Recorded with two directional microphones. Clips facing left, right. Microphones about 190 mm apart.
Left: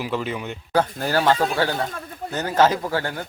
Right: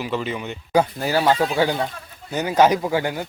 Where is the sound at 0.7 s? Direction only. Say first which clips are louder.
Right 2 dB; 5° right (ahead or behind).